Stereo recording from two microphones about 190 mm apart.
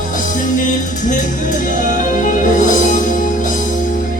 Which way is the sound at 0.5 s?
40° left (ahead or behind).